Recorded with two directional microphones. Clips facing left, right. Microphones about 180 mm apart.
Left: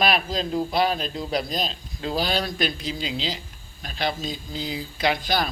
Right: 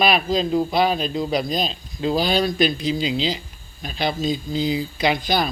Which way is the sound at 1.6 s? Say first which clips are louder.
Right 5 dB; centre (ahead or behind).